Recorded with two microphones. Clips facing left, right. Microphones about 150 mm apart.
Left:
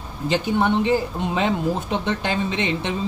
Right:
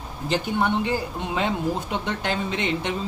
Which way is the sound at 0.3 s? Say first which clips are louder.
Left 3 dB; 20° left (ahead or behind).